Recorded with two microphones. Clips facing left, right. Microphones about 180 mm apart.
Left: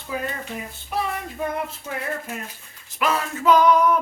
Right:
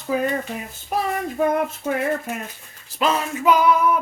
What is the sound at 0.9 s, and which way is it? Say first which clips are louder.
Child singing: right 3 dB; 45° right (ahead or behind).